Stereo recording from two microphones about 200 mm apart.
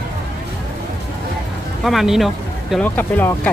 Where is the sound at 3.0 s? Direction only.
10° left (ahead or behind).